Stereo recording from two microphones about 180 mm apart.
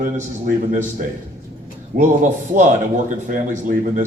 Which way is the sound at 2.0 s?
45° right (ahead or behind).